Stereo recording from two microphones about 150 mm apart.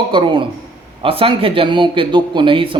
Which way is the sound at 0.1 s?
35° right (ahead or behind).